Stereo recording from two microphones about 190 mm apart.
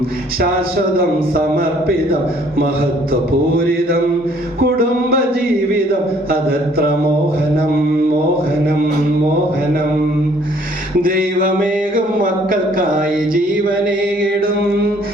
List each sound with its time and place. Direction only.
0.9 s a man's voice: 50° right (ahead or behind)
4.6 s music: 50° right (ahead or behind)
6.3 s a man's voice: 55° right (ahead or behind)
11.0 s a sound: 45° right (ahead or behind)